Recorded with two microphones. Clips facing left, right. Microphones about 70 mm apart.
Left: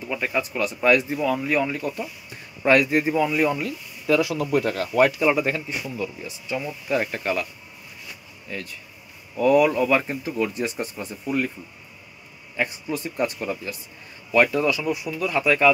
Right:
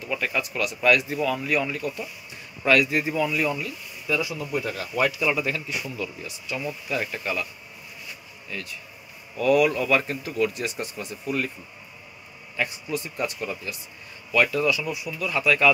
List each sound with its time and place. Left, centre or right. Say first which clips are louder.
0.1 s speech: left 2 dB; left
4.2 s speech: left 6 dB; left
5.8 s speech: left 2 dB; centre; by 7.4 s left
8.5 s speech: left 2 dB; left
12.5 s speech: left 2 dB; left
15.3 s speech: left 2 dB; left